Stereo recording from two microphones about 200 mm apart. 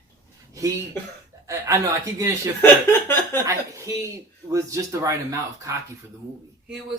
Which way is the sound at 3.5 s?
15° right (ahead or behind).